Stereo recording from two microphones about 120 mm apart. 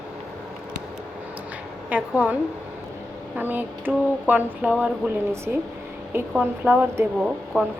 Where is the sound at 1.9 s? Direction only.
15° right (ahead or behind).